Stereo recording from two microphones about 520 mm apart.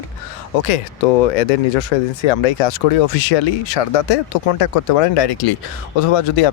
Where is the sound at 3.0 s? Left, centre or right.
Left.